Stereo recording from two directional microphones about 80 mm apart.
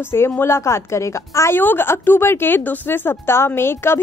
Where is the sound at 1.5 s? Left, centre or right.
Left.